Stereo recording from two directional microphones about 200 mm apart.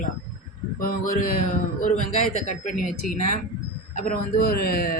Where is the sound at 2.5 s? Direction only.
40° left (ahead or behind).